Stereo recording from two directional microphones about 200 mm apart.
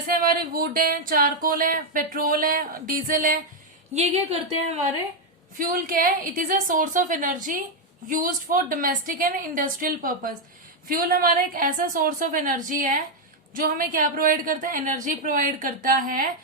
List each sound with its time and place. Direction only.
0.1 s speech: 45° right (ahead or behind)
3.9 s a woman's voice: 30° right (ahead or behind)
5.5 s a woman's voice: 45° right (ahead or behind)